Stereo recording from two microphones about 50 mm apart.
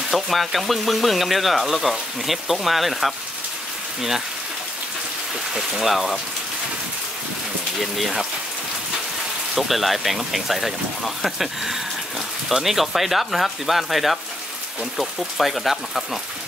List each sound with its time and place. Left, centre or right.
0.1 s speech: centre
5.5 s speech: centre
7.8 s speech: centre
9.6 s speech: centre